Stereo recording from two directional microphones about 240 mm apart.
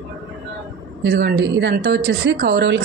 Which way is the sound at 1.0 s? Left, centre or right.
Right.